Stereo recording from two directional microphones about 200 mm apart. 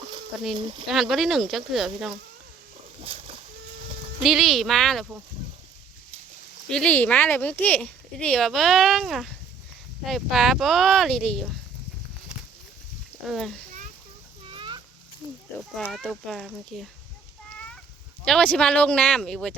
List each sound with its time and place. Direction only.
0.5 s speech: 25° right (ahead or behind)
0.9 s speech: centre (ahead or behind)
4.2 s speech: centre (ahead or behind)
6.7 s speech: 5° left (ahead or behind)
13.2 s speech: centre (ahead or behind)
14.4 s a sound: 25° right (ahead or behind)
15.8 s speech: centre (ahead or behind)
17.5 s a sound: 5° left (ahead or behind)
18.3 s speech: 5° left (ahead or behind)